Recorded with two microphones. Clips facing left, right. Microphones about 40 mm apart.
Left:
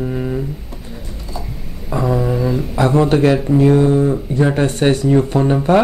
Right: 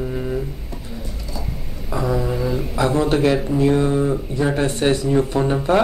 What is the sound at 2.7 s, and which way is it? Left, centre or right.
Speech, left.